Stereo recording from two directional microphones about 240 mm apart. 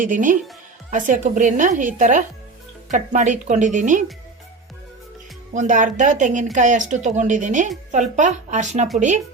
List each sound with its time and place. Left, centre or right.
0.0 s speech: right
5.5 s a woman's voice: right